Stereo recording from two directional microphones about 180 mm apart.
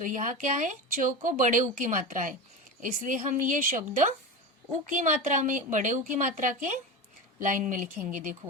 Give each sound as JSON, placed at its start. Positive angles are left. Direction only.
{"t": 0.0, "sound": "speech", "side_deg": -45}